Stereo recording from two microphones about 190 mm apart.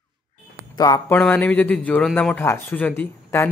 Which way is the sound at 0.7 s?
20° left (ahead or behind).